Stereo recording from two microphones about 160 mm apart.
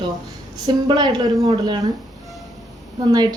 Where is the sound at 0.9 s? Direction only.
25° right (ahead or behind).